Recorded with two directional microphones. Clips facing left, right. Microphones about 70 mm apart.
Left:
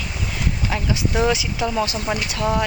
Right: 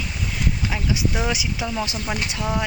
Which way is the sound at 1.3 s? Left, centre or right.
Centre.